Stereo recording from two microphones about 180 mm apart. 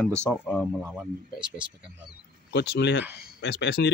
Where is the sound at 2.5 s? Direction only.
70° left (ahead or behind).